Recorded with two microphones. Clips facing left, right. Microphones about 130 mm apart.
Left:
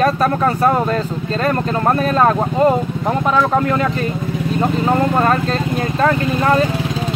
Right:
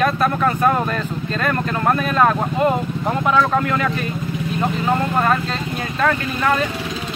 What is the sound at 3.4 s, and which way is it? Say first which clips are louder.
Speech: left 2 dB; 30° left (ahead or behind).